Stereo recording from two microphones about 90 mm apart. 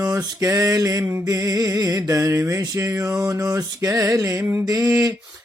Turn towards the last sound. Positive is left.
turn(degrees=-35)  # may be behind; listen again after turning